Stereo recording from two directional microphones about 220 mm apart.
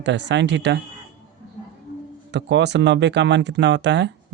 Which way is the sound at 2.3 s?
50° right (ahead or behind).